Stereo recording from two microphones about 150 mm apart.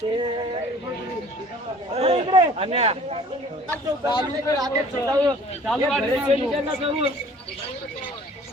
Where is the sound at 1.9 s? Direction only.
40° right (ahead or behind).